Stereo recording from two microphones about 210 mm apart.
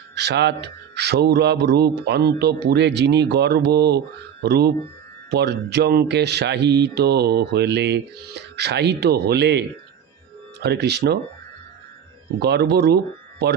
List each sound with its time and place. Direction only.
0.1 s speech: 55° right (ahead or behind)
12.4 s speech: 50° right (ahead or behind)